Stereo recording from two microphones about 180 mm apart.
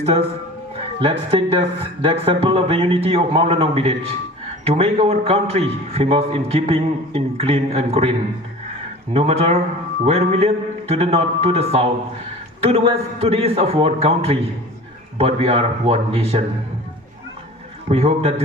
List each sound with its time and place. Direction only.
1.0 s a man's voice: 30° right (ahead or behind)
9.1 s a man's voice: 35° right (ahead or behind)
17.8 s a man's voice: 35° right (ahead or behind)